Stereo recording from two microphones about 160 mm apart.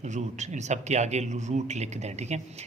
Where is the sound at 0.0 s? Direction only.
45° right (ahead or behind).